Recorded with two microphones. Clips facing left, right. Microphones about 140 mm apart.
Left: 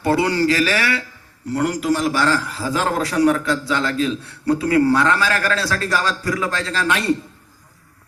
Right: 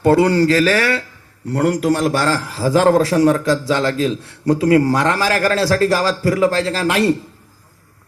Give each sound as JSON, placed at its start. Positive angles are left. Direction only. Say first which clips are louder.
{"t": 0.0, "sound": "a man's voice", "louder": "right 5 dB", "side_deg": -35}
{"t": 1.5, "sound": "a man's voice", "louder": "right 3 dB", "side_deg": -60}
{"t": 2.2, "sound": "a man's voice", "louder": "right 2 dB", "side_deg": -35}